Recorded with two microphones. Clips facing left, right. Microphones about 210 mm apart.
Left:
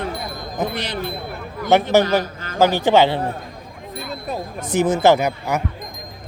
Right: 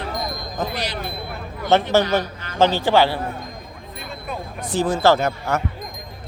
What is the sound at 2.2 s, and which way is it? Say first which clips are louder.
Speech: left 2 dB; 45° left (ahead or behind).